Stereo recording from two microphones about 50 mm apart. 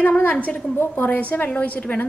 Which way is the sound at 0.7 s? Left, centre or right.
Left.